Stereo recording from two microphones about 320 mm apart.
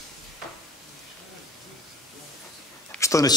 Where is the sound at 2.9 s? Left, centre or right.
Centre.